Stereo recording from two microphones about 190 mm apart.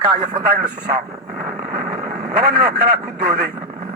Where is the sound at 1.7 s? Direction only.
50° right (ahead or behind).